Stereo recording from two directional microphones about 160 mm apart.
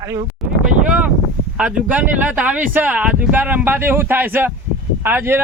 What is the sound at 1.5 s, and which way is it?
Speech, 5° right (ahead or behind).